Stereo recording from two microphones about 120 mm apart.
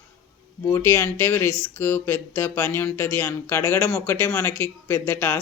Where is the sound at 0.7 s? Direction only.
20° left (ahead or behind).